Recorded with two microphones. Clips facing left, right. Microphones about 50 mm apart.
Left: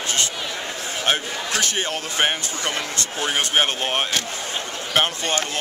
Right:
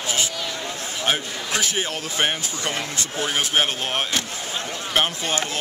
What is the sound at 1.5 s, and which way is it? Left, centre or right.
Speech, centre.